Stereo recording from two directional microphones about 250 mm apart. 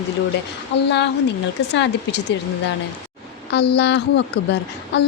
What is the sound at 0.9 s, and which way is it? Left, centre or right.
A woman's voice, left.